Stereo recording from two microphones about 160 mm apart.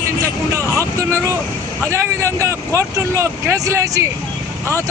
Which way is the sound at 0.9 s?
15° right (ahead or behind).